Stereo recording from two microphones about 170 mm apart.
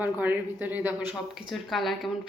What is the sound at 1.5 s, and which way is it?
Speech, centre (ahead or behind).